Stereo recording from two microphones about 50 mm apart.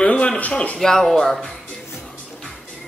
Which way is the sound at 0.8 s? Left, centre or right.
Centre.